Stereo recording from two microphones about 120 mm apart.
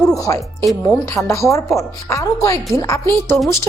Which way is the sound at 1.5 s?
25° left (ahead or behind).